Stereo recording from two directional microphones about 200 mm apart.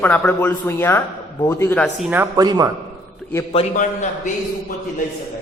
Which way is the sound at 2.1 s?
15° right (ahead or behind).